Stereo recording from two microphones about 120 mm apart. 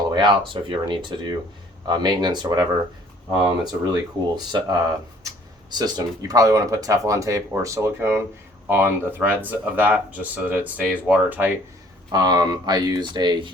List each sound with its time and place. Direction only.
0.1 s speech: 40° right (ahead or behind)
5.7 s speech: 35° right (ahead or behind); by 11.5 s 15° right (ahead or behind)
12.1 s speech: 35° right (ahead or behind)